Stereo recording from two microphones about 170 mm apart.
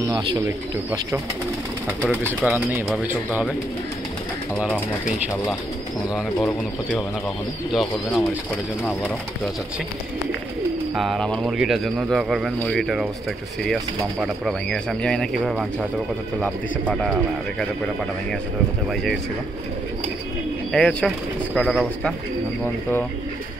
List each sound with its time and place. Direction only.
0.0 s speech: 25° right (ahead or behind)
2.0 s speech: 10° right (ahead or behind)
4.6 s a man's voice: 5° left (ahead or behind)
7.7 s a man's voice: centre (ahead or behind)
11.0 s a man's voice: centre (ahead or behind)
14.2 s a man's voice: centre (ahead or behind)
20.7 s a man's voice: 5° left (ahead or behind)